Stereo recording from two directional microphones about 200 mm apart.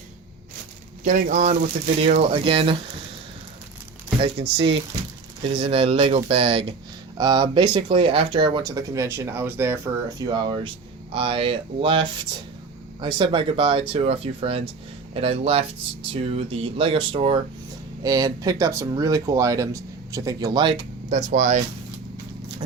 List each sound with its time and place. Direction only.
1.0 s speech: 40° right (ahead or behind)
4.2 s speech: 30° right (ahead or behind)